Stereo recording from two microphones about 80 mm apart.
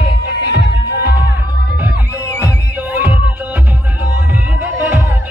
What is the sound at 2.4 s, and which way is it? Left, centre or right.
Music, left.